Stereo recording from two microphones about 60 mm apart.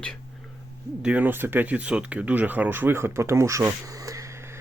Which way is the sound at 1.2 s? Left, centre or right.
Right.